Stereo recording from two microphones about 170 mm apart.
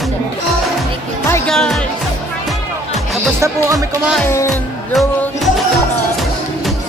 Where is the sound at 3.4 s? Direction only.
20° right (ahead or behind).